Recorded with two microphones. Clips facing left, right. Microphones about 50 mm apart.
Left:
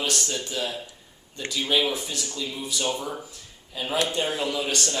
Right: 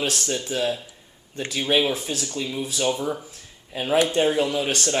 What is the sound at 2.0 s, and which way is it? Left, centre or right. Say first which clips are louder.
Speech: right 4 dB; right.